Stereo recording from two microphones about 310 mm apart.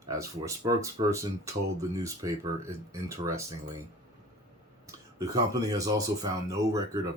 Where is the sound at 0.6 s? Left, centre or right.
Centre.